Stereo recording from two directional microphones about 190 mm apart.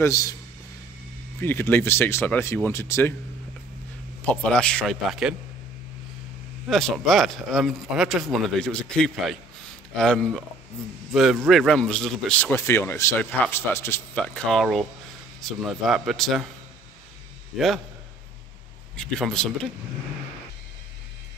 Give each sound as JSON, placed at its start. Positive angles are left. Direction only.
{"t": 0.0, "sound": "speech", "side_deg": 15}
{"t": 1.4, "sound": "speech", "side_deg": 10}
{"t": 4.2, "sound": "a man's voice", "side_deg": 5}
{"t": 6.7, "sound": "a man's voice", "side_deg": 0}
{"t": 11.4, "sound": "a man's voice", "side_deg": 0}
{"t": 17.5, "sound": "a man's voice", "side_deg": 0}
{"t": 18.9, "sound": "a man's voice", "side_deg": 5}